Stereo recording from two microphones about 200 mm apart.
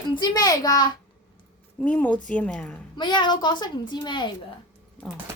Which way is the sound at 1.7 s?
5° left (ahead or behind).